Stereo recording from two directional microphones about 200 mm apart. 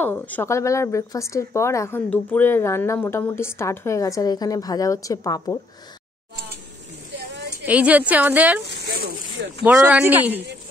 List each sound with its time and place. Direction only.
0.0 s speech: 10° left (ahead or behind)
7.6 s speech: 5° right (ahead or behind)
8.8 s a sound: 50° right (ahead or behind)
9.6 s speech: 5° right (ahead or behind)